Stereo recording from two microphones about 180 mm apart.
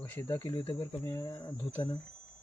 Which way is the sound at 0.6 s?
30° left (ahead or behind).